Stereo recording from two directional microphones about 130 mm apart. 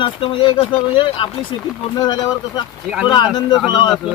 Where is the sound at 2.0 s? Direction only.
30° left (ahead or behind).